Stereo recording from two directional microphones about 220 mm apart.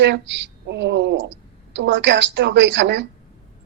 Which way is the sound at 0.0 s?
55° right (ahead or behind).